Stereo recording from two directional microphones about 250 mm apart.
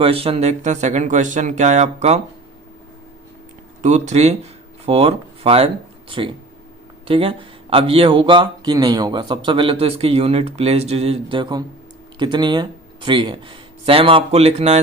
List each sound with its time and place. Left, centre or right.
0.0 s speech: right
3.8 s speech: right